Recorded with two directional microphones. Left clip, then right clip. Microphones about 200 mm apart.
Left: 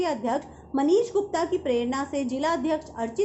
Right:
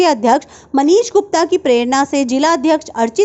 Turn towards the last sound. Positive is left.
turn(degrees=-50)  # may be behind; listen again after turning